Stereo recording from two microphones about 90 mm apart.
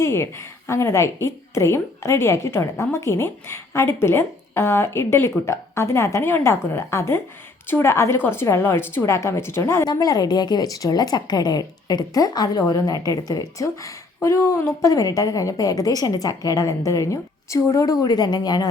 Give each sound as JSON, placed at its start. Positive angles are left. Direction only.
{"t": 0.0, "sound": "a woman's voice", "side_deg": 30}
{"t": 9.8, "sound": "a woman's voice", "side_deg": 45}